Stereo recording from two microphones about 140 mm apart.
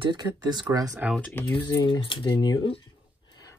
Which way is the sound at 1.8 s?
35° left (ahead or behind).